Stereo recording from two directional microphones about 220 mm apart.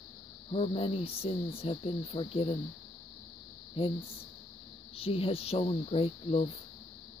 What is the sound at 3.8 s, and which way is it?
Speech, 25° left (ahead or behind).